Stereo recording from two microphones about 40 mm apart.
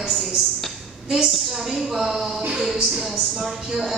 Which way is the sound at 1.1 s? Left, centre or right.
Centre.